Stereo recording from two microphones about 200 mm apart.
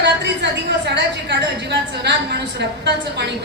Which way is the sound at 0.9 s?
60° right (ahead or behind).